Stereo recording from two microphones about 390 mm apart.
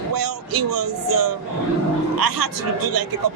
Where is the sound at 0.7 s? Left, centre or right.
Right.